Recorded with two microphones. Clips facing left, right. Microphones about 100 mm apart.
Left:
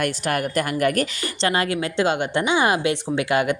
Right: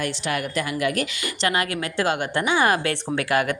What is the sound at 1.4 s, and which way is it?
Speech, 30° left (ahead or behind).